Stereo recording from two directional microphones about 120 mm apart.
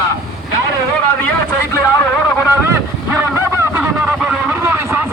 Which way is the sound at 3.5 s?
10° right (ahead or behind).